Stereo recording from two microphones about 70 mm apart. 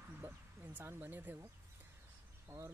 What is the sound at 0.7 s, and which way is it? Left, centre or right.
Speech, right.